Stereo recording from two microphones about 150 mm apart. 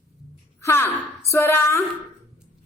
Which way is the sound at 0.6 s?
15° left (ahead or behind).